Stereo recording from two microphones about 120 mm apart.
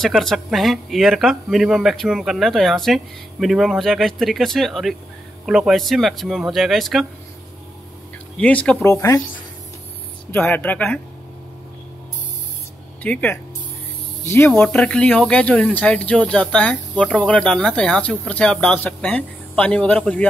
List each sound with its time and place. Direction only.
0.0 s speech: centre (ahead or behind)
8.4 s speech: 10° left (ahead or behind)
8.8 s speech: 25° left (ahead or behind)
10.3 s speech: 15° left (ahead or behind)
13.0 s speech: 15° left (ahead or behind)
14.5 s speech: 5° left (ahead or behind)